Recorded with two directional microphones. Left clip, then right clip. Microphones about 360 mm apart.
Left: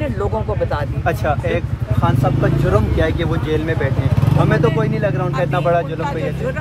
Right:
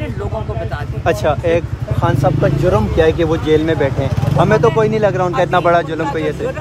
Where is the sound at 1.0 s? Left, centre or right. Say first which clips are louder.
Right 6 dB; right.